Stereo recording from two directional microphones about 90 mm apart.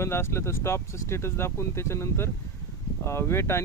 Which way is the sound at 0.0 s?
30° left (ahead or behind).